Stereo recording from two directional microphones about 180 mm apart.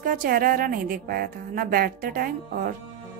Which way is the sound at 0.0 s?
50° right (ahead or behind).